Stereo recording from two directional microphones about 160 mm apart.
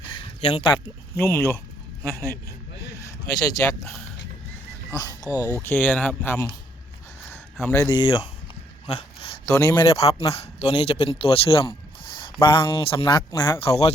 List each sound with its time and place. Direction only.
0.4 s speech: 35° left (ahead or behind)
1.1 s speech: 15° left (ahead or behind)
3.0 s speech: 20° left (ahead or behind)
4.9 s speech: 20° left (ahead or behind)
5.6 s speech: 10° left (ahead or behind)
7.6 s speech: 15° left (ahead or behind)
8.0 s speech: 35° left (ahead or behind)
8.9 s a sound: 40° left (ahead or behind)
9.5 s a man's voice: 20° left (ahead or behind)
9.9 s speech: 35° left (ahead or behind)
13.7 s speech: 40° left (ahead or behind)